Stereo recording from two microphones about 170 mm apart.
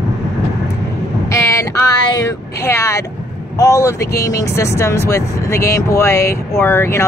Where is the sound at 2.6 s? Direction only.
15° left (ahead or behind).